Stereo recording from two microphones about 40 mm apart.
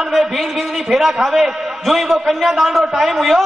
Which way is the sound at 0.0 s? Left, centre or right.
Centre.